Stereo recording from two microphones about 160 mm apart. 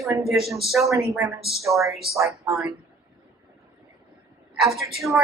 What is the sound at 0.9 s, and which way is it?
Speech, 20° right (ahead or behind).